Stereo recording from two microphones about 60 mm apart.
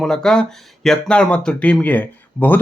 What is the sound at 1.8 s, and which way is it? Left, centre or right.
Speech, left.